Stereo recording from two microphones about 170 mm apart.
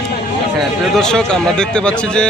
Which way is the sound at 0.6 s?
5° left (ahead or behind).